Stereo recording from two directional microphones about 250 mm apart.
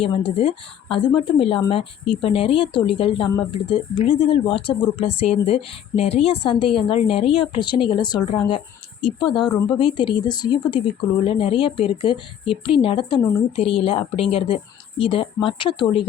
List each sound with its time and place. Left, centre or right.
0.0 s a woman's voice: left